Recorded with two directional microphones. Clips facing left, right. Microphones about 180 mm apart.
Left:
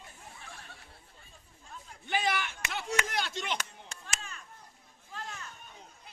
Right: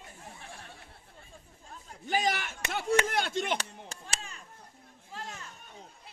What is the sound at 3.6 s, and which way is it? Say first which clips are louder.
Chop: right 2 dB; 30° right (ahead or behind).